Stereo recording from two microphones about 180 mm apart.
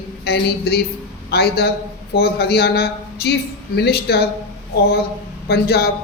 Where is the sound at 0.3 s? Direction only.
60° left (ahead or behind).